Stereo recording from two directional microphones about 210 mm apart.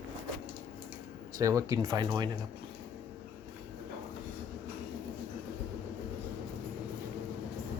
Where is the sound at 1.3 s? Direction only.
15° right (ahead or behind).